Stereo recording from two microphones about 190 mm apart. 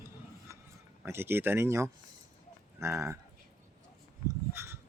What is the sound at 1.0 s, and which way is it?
Speech, 10° right (ahead or behind).